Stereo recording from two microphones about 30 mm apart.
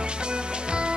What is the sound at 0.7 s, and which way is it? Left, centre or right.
Music, right.